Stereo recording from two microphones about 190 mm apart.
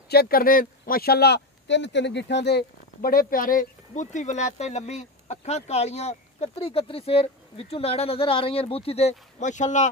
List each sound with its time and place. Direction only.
0.1 s speech: 55° left (ahead or behind)